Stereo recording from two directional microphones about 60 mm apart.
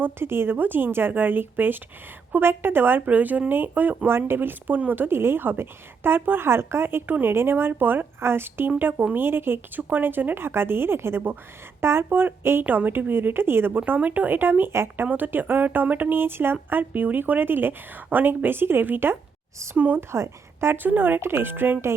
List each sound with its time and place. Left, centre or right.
0.0 s a woman's voice: right
15.0 s a woman's voice: right
20.0 s a woman's voice: right
20.7 s a woman's voice: right